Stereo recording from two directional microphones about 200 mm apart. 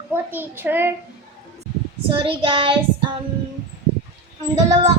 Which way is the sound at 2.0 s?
25° right (ahead or behind).